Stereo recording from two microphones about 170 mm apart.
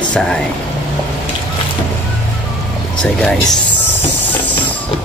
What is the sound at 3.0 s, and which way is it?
Speech, 5° left (ahead or behind).